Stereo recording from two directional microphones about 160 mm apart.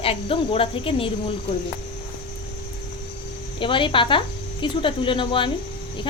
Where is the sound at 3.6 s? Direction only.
30° left (ahead or behind).